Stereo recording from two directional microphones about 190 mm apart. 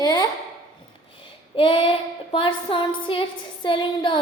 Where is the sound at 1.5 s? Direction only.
25° left (ahead or behind).